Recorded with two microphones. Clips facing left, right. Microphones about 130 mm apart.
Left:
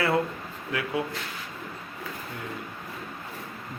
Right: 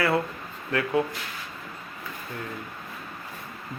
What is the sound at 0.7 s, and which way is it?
Speech, 10° left (ahead or behind).